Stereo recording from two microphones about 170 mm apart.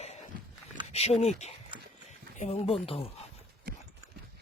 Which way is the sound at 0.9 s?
40° left (ahead or behind).